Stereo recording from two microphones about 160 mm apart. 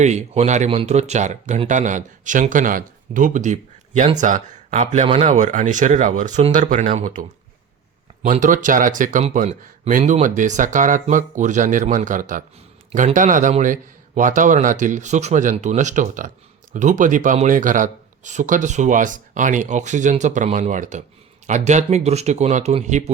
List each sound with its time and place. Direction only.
0.0 s speech: 45° right (ahead or behind)